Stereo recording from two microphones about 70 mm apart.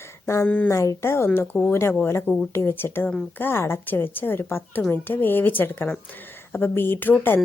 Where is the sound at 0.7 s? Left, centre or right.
Left.